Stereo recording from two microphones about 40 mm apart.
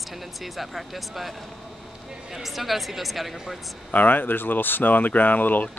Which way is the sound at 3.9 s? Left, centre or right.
Left.